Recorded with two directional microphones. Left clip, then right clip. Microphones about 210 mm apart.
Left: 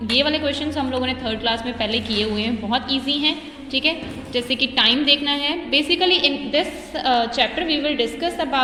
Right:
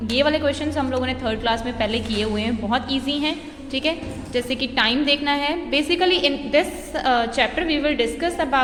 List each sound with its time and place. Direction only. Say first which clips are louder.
0.1 s a woman's voice: even; 5° left (ahead or behind)
4.4 s a woman's voice: left 2 dB; 5° left (ahead or behind)